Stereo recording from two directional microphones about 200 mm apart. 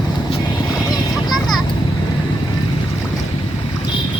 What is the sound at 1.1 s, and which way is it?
Vehicle, centre (ahead or behind).